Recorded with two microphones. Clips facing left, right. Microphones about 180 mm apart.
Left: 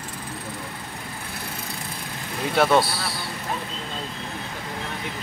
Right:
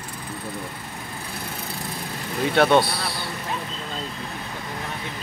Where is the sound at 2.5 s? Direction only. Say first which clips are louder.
Right 1 dB; centre (ahead or behind).